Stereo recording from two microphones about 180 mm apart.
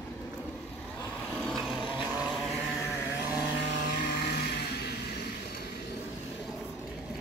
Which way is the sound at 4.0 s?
55° left (ahead or behind).